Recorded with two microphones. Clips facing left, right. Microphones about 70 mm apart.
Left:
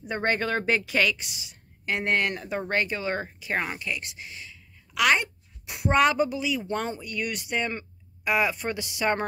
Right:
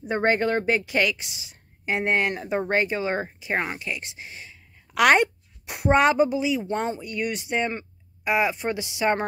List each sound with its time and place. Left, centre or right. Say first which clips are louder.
0.2 s a woman's voice: right 4 dB; centre; by 5.0 s right
5.0 s a sound: right 5 dB; right
5.9 s speech: right 3 dB; right